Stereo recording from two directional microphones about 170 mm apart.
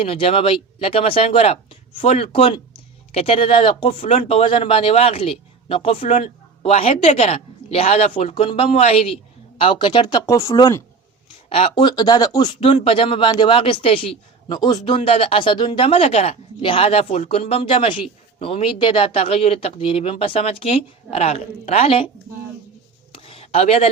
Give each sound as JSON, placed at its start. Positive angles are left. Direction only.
{"t": 0.0, "sound": "speech", "side_deg": 35}
{"t": 4.0, "sound": "speech", "side_deg": 45}
{"t": 11.4, "sound": "speech", "side_deg": 35}
{"t": 12.5, "sound": "speech", "side_deg": 35}
{"t": 23.1, "sound": "a sound", "side_deg": 35}